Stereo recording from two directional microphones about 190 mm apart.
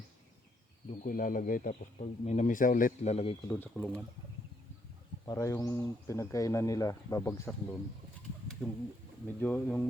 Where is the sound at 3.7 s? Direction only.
5° left (ahead or behind).